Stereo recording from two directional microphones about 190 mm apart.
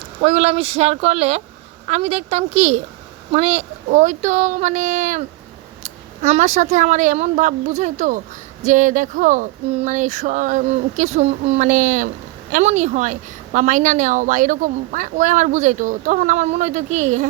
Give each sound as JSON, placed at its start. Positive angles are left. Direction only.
{"t": 0.2, "sound": "a woman's voice", "side_deg": -35}